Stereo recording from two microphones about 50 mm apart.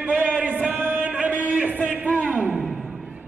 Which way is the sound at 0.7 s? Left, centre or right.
Right.